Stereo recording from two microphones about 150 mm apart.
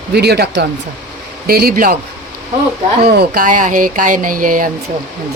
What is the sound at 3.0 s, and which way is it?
Speech, 90° right.